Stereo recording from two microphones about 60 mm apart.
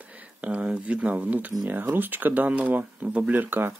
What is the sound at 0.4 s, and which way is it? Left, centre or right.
Speech, centre.